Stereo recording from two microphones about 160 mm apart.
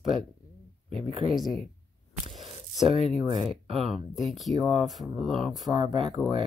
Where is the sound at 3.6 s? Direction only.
40° right (ahead or behind).